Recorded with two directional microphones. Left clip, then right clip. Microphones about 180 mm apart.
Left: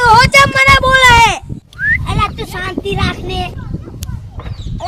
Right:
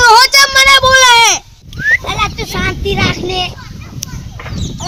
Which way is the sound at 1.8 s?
40° left (ahead or behind).